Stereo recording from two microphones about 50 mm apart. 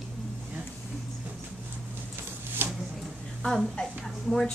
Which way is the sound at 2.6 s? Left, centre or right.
Right.